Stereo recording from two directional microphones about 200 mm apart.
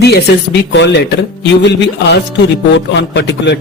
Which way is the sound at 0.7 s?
60° left (ahead or behind).